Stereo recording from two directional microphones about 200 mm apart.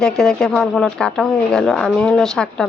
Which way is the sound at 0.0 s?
5° left (ahead or behind).